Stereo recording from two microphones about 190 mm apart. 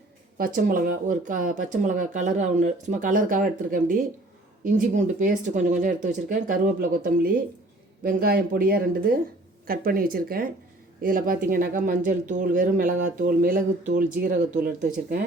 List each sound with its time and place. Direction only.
0.3 s speech: 45° right (ahead or behind)